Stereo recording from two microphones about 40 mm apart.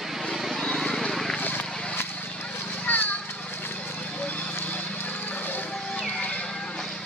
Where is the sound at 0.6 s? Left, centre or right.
Centre.